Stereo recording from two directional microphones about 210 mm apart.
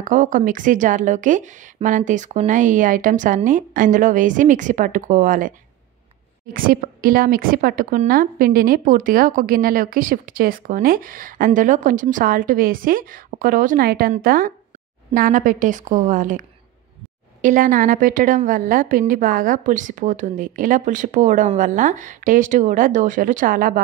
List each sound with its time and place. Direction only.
0.0 s speech: 40° right (ahead or behind)